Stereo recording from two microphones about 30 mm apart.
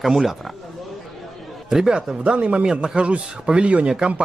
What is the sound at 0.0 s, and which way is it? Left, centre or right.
Speech, centre.